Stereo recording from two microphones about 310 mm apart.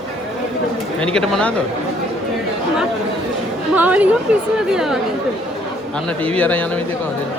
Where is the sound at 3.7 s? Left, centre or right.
Centre.